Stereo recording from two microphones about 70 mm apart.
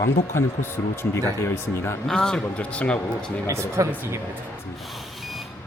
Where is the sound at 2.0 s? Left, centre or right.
Centre.